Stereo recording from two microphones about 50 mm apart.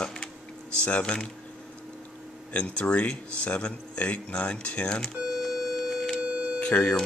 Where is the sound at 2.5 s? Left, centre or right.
Left.